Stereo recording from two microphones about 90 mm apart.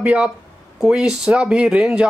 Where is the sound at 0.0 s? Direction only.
15° right (ahead or behind).